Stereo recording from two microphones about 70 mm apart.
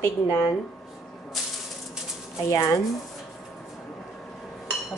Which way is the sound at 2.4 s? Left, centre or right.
Left.